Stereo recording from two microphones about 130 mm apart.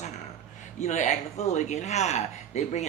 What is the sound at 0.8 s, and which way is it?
Speech, 70° left (ahead or behind).